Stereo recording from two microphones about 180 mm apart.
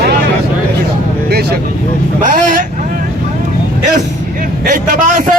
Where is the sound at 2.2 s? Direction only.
45° right (ahead or behind).